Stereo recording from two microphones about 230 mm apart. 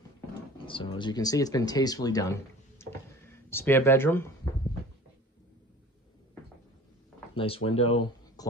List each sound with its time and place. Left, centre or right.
0.7 s speech: left
2.8 s a sound: centre
7.3 s speech: left